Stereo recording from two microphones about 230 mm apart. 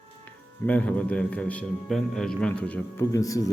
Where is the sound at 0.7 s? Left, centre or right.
Centre.